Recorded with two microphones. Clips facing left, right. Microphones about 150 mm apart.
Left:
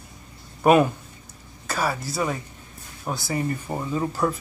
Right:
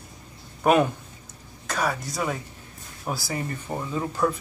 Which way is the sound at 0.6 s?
5° left (ahead or behind).